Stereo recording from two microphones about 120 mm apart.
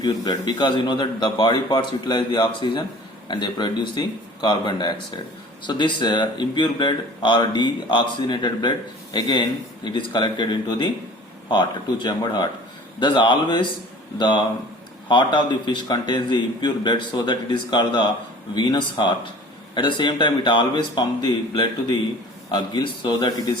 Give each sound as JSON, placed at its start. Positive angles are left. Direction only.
{"t": 0.0, "sound": "speech", "side_deg": 35}